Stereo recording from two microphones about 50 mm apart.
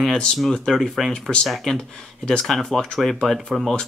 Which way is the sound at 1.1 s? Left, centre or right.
Centre.